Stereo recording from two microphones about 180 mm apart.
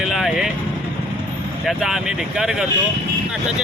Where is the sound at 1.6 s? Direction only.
Centre (ahead or behind).